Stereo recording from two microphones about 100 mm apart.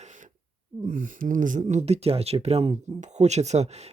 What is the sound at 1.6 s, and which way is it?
Speech, 90° right.